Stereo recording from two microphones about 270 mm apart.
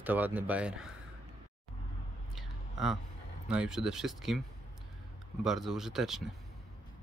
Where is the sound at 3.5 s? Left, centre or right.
Centre.